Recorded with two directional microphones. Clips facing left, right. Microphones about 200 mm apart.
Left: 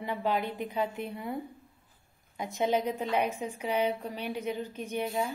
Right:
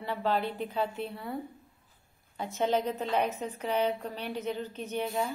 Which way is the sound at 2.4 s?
15° left (ahead or behind).